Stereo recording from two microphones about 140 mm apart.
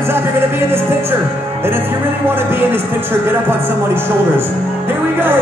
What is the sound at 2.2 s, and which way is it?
Speech, 15° right (ahead or behind).